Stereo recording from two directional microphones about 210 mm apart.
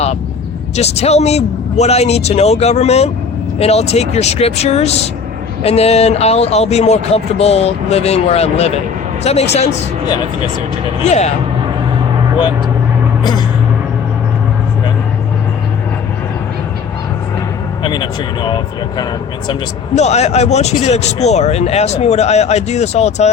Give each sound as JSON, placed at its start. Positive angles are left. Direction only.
{"t": 0.8, "sound": "speech", "side_deg": 30}
{"t": 11.0, "sound": "speech", "side_deg": 30}
{"t": 17.8, "sound": "speech", "side_deg": 20}